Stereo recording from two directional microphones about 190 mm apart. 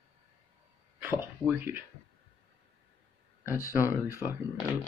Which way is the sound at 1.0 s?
10° right (ahead or behind).